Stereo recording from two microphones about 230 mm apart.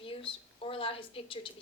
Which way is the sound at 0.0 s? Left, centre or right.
Left.